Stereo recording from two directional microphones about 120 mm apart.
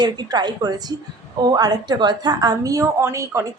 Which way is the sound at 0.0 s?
35° right (ahead or behind).